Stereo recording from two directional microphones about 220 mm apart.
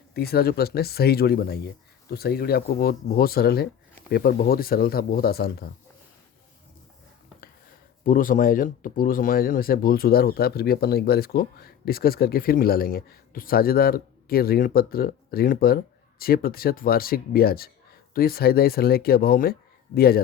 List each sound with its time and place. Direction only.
0.1 s speech: 45° left (ahead or behind)
8.0 s speech: 40° left (ahead or behind)